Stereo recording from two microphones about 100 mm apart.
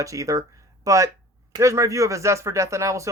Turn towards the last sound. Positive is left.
turn(degrees=-30)  # may be behind; listen again after turning